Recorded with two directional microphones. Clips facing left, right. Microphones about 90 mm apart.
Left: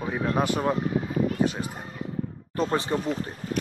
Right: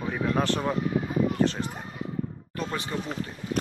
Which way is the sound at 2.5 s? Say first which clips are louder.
Left 6 dB; 35° left (ahead or behind).